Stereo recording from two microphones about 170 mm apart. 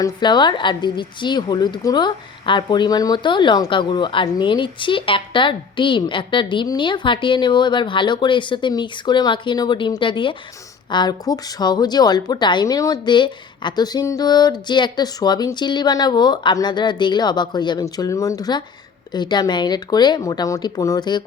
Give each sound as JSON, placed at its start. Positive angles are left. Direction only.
{"t": 0.0, "sound": "a woman's voice", "side_deg": 25}